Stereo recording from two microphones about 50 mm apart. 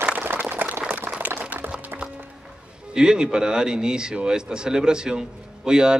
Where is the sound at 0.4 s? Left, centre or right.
Right.